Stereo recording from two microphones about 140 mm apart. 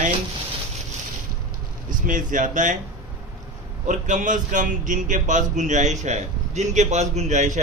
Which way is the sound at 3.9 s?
65° right (ahead or behind).